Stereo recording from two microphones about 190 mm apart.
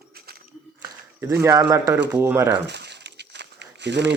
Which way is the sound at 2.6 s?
65° right (ahead or behind).